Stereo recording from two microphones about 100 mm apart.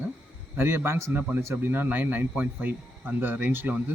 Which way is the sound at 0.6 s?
25° right (ahead or behind).